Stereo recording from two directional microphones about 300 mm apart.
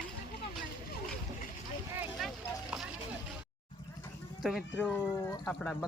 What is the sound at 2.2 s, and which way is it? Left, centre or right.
Vehicle, centre.